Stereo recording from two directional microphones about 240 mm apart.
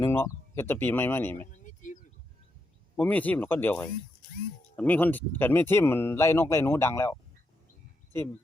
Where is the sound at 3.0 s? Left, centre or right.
Centre.